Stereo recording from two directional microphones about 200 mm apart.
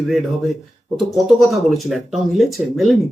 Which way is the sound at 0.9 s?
Centre (ahead or behind).